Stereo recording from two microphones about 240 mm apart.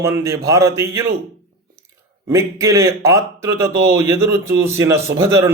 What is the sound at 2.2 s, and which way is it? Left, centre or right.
Speech, centre.